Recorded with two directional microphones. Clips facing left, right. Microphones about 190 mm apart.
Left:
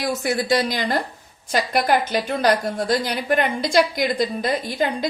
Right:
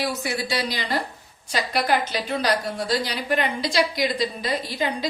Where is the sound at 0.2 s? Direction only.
50° left (ahead or behind).